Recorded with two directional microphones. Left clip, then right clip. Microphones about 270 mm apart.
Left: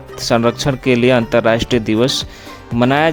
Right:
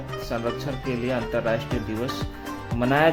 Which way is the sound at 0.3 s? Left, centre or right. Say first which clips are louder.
Left 15 dB; left.